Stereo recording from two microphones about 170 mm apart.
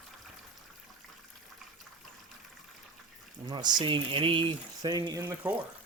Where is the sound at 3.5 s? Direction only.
25° right (ahead or behind).